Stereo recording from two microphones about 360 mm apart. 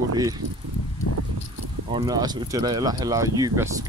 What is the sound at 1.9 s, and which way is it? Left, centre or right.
Speech, centre.